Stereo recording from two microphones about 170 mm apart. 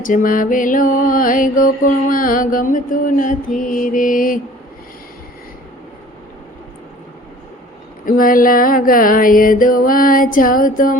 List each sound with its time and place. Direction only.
0.0 s mantra: 50° left (ahead or behind)
8.0 s music: 55° left (ahead or behind)